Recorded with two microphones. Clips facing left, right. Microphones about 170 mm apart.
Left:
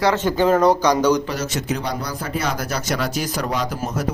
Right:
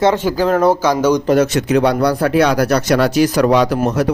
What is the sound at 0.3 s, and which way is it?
Speech, centre (ahead or behind).